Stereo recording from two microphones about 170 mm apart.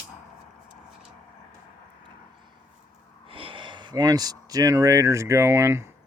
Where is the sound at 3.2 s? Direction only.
30° right (ahead or behind); by 6.0 s 15° right (ahead or behind).